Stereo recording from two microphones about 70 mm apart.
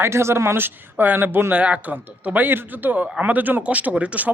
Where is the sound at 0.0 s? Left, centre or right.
Right.